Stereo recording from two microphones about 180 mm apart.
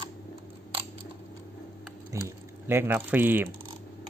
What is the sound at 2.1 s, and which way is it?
Speech, 15° right (ahead or behind).